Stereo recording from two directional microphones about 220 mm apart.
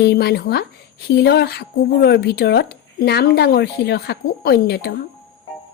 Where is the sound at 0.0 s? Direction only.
50° left (ahead or behind).